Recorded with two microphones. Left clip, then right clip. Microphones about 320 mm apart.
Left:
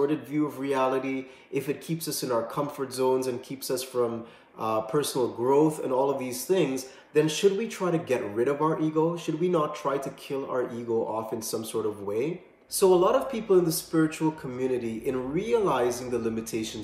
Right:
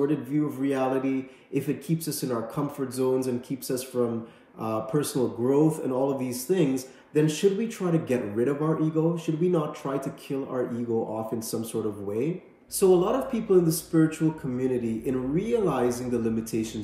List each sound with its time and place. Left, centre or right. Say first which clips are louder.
0.0 s speech: even; centre